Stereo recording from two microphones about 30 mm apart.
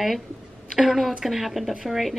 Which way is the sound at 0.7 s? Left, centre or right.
Centre.